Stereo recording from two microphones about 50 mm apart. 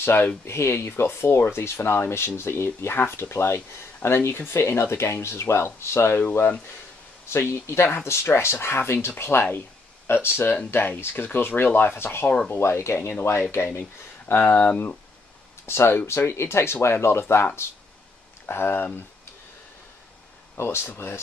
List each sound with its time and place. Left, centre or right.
0.0 s speech: left
0.5 s speech: left
7.2 s speech: left
15.6 s speech: left
18.4 s speech: left
20.5 s speech: left